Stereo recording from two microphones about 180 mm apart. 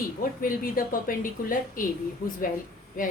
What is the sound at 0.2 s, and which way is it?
A woman's voice, 50° left (ahead or behind).